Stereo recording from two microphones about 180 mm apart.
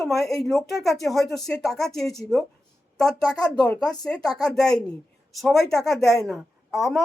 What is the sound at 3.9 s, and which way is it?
A woman's voice, 5° left (ahead or behind).